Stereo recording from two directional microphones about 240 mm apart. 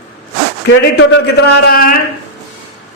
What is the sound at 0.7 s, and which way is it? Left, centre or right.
A man's voice, left.